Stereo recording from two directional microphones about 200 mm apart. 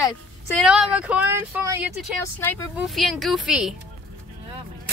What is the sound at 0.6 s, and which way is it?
Speech, 5° right (ahead or behind).